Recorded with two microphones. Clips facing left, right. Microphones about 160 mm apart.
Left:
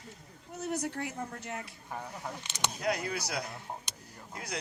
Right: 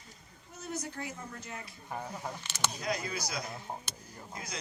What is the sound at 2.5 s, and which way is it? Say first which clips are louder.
Speech: even; 20° left (ahead or behind).